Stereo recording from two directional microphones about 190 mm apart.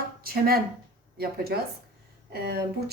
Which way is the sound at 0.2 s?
55° right (ahead or behind).